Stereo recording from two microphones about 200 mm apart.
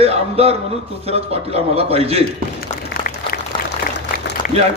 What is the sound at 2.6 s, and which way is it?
Applause, 45° left (ahead or behind).